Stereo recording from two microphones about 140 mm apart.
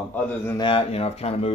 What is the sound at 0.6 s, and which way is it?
Speech, 40° left (ahead or behind).